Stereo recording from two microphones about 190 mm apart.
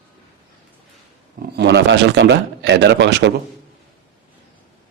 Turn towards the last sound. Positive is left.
turn(degrees=-65)  # may be behind; listen again after turning